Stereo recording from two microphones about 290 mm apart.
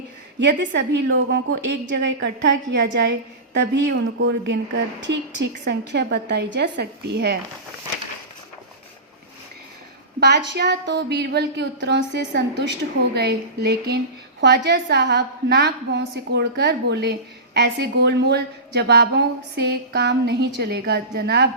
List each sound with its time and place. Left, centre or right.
0.3 s a woman's voice: right
10.2 s a woman's voice: right